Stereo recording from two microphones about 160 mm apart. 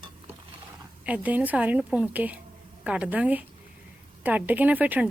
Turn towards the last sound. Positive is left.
turn(degrees=-10)  # may be behind; listen again after turning